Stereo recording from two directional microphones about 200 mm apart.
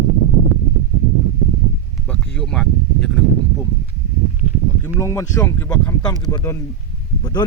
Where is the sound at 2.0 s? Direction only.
5° left (ahead or behind).